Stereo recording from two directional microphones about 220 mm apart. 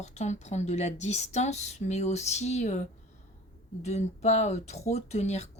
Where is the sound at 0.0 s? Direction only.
30° left (ahead or behind).